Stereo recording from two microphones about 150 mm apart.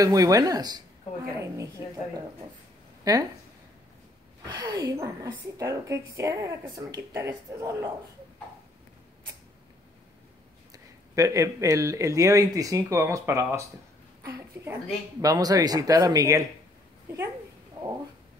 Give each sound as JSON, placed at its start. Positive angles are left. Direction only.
{"t": 0.0, "sound": "speech", "side_deg": -25}
{"t": 3.0, "sound": "a sound", "side_deg": -25}
{"t": 4.5, "sound": "speech", "side_deg": -25}
{"t": 10.7, "sound": "a woman's voice", "side_deg": -20}